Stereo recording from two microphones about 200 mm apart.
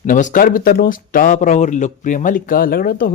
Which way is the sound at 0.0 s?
40° left (ahead or behind).